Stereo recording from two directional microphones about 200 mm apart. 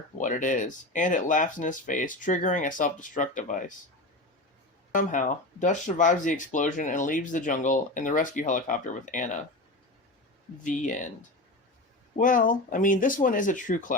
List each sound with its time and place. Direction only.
0.2 s speech: 40° left (ahead or behind)
4.9 s speech: 40° left (ahead or behind)
10.6 s speech: 40° left (ahead or behind)
12.1 s speech: 40° left (ahead or behind)